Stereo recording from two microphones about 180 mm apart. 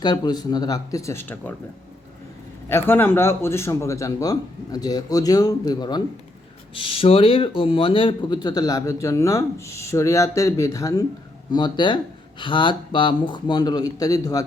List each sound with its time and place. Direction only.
0.0 s speech: 25° left (ahead or behind)
2.6 s speech: 15° left (ahead or behind)